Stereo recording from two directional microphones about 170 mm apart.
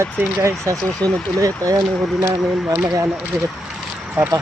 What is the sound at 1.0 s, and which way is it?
Speech, 10° left (ahead or behind).